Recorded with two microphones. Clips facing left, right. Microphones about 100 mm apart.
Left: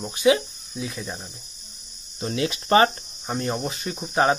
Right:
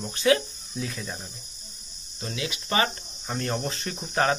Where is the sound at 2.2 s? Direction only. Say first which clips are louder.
Left 7 dB; 40° left (ahead or behind).